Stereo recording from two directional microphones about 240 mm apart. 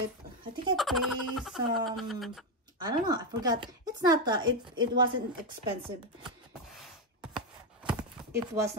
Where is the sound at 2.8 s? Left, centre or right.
Centre.